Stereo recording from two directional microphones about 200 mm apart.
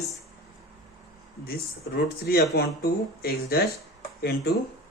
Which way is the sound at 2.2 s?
50° left (ahead or behind).